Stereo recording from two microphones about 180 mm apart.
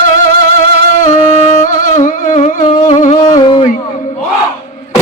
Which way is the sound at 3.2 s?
25° left (ahead or behind).